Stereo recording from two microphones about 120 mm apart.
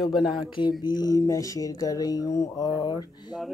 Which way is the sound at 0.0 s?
Centre (ahead or behind).